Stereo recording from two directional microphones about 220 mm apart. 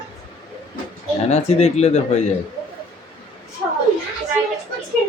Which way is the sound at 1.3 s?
30° left (ahead or behind).